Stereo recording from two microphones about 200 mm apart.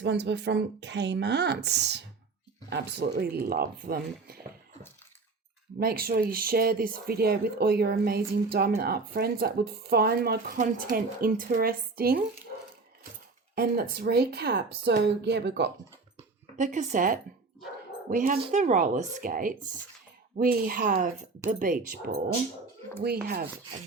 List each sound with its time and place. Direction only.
0.0 s a woman's voice: 60° right (ahead or behind)
5.8 s speech: 50° right (ahead or behind)
13.6 s speech: 50° right (ahead or behind)
16.1 s a sound: 40° right (ahead or behind)
18.1 s speech: 40° right (ahead or behind)
23.2 s speech: 50° right (ahead or behind)